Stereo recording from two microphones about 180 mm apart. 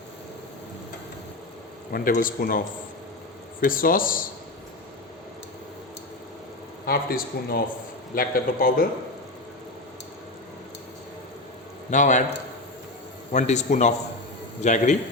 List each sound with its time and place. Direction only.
1.9 s speech: 55° left (ahead or behind)
6.8 s speech: 55° left (ahead or behind)
11.9 s speech: 45° left (ahead or behind)
13.3 s a man's voice: 40° left (ahead or behind)